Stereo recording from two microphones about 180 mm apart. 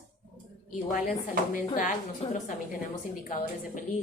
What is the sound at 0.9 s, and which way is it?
Speech, 50° left (ahead or behind).